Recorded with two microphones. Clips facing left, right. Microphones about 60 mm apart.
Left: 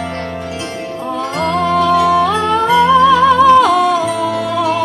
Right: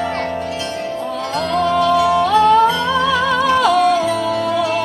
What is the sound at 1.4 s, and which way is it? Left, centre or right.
Music, left.